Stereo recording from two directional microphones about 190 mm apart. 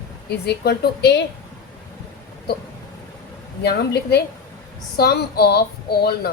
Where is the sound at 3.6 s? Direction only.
60° left (ahead or behind).